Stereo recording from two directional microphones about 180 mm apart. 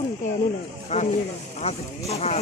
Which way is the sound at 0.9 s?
40° left (ahead or behind).